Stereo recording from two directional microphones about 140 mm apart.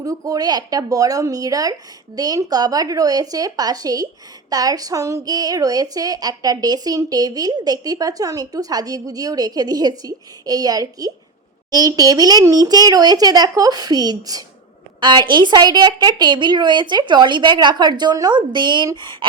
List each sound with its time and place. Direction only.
0.0 s a woman's voice: 25° right (ahead or behind)